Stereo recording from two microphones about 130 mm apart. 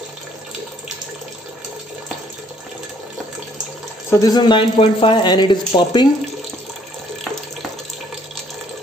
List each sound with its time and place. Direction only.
4.1 s speech: 30° left (ahead or behind)